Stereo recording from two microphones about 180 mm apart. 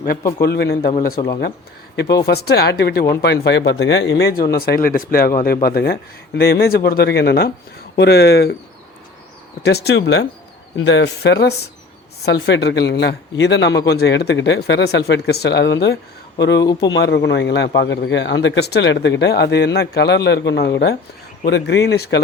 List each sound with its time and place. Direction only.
0.2 s a man's voice: 20° left (ahead or behind)
0.4 s speech: 60° left (ahead or behind)
2.2 s speech: 60° left (ahead or behind)
9.6 s speech: 65° left (ahead or behind)
10.8 s speech: 90° left; by 22.2 s 65° left (ahead or behind)